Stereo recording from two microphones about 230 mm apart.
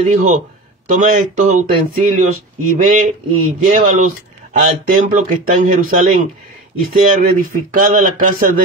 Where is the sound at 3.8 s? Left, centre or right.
Right.